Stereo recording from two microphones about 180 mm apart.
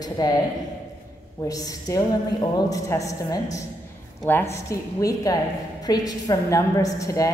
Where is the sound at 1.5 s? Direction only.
20° left (ahead or behind).